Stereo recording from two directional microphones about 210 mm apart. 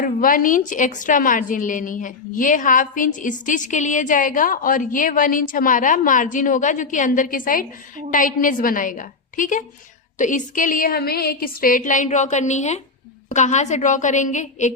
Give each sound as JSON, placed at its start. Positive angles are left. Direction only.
{"t": 0.0, "sound": "a woman's voice", "side_deg": 40}